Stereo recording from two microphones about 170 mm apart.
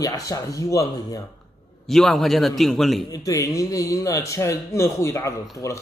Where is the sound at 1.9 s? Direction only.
Centre (ahead or behind).